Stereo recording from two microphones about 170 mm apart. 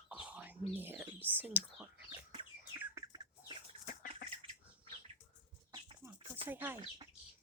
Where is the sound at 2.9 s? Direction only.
25° right (ahead or behind).